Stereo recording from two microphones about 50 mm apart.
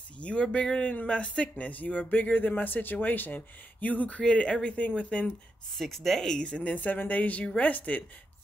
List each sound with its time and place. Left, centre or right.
0.2 s speech: left
4.2 s speech: centre
5.8 s speech: centre
6.4 s speech: left